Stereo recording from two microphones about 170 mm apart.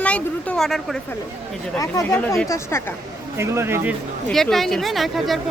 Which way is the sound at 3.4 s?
15° right (ahead or behind).